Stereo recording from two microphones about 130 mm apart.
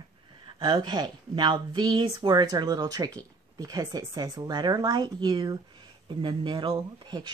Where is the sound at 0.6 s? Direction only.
35° right (ahead or behind).